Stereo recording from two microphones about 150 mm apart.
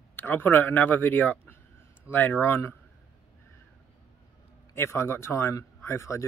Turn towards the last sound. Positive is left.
turn(degrees=20)  # may be behind; listen again after turning